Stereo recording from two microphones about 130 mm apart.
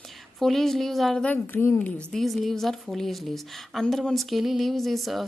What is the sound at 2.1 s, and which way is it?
A woman's voice, centre (ahead or behind).